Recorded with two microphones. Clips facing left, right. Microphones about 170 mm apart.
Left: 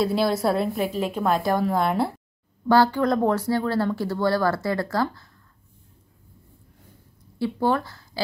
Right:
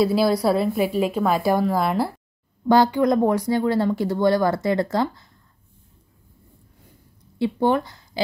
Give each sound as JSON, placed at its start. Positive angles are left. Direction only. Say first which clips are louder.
{"t": 0.0, "sound": "a woman's voice", "louder": "right 3 dB", "side_deg": -5}
{"t": 2.7, "sound": "speech", "louder": "right 2 dB", "side_deg": -15}
{"t": 7.3, "sound": "speech", "louder": "right 3 dB", "side_deg": -20}